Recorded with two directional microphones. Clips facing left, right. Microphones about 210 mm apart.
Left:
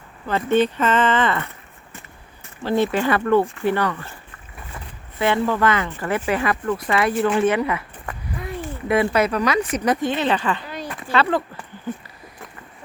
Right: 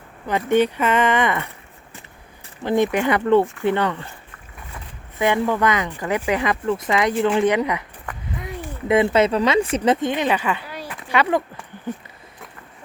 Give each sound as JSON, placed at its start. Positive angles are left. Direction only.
{"t": 0.3, "sound": "speech", "side_deg": -15}
{"t": 2.6, "sound": "speech", "side_deg": -15}
{"t": 5.2, "sound": "speech", "side_deg": -15}